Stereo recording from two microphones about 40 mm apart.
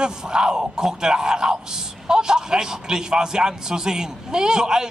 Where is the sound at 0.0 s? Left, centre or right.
Centre.